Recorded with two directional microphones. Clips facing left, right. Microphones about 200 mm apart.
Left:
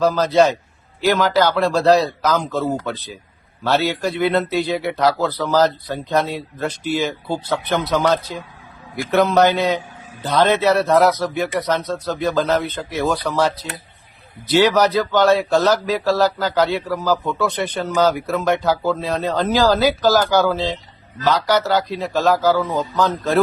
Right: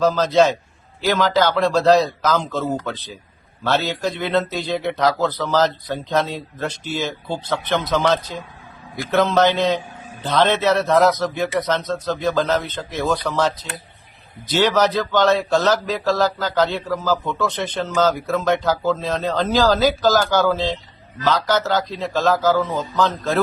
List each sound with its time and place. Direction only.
0.0 s speech: 10° left (ahead or behind)